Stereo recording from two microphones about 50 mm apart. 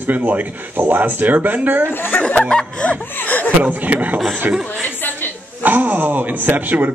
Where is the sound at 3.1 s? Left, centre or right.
Left.